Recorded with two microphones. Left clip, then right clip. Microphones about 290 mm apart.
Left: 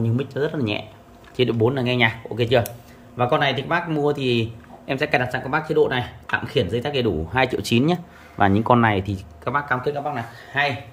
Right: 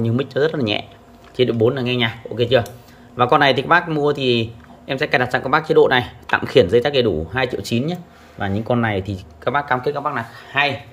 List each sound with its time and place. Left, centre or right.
0.0 s speech: centre
3.2 s speech: centre